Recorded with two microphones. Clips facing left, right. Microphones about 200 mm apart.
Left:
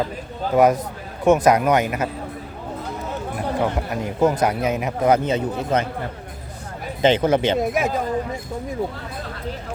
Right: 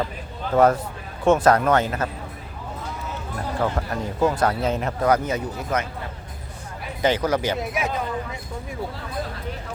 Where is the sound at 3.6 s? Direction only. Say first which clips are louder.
Left 2 dB; 20° left (ahead or behind).